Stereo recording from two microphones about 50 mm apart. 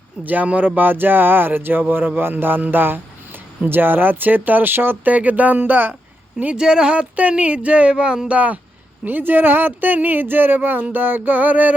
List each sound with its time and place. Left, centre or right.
0.3 s speech: right
5.1 s speech: right
6.6 s speech: centre
9.0 s speech: right